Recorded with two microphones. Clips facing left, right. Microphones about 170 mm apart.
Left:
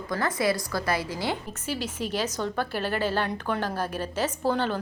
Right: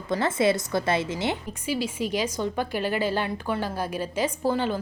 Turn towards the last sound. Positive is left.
turn(degrees=-10)  # may be behind; listen again after turning